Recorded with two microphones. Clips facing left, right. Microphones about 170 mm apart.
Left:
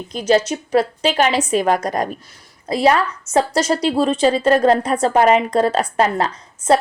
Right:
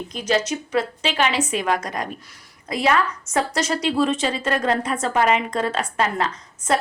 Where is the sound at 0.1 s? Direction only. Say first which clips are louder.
Left 6 dB; 35° left (ahead or behind).